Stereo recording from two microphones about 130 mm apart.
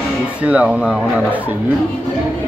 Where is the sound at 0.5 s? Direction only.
5° right (ahead or behind).